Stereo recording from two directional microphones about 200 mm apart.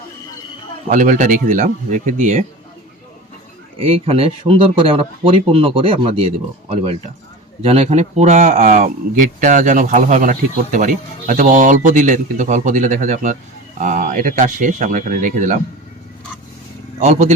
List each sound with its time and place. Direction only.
0.9 s a man's voice: 40° right (ahead or behind)
3.8 s speech: 30° right (ahead or behind)
7.6 s a man's voice: 30° right (ahead or behind)
17.0 s a man's voice: 35° right (ahead or behind)